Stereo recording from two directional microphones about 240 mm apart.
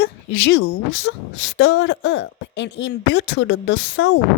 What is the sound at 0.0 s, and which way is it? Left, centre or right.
A woman's voice, left.